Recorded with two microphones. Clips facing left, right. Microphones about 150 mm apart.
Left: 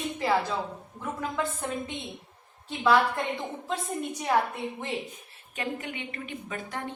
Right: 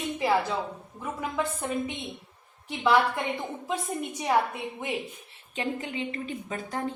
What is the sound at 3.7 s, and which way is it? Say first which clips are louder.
Speech: even; 10° right (ahead or behind).